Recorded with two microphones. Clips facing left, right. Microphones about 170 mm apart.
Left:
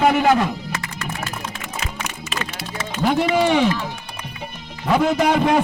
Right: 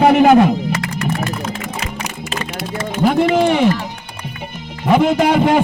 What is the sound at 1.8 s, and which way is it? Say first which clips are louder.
Music: right 4 dB; 35° right (ahead or behind).